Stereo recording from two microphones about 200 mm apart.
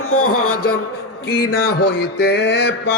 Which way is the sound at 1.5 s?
60° left (ahead or behind).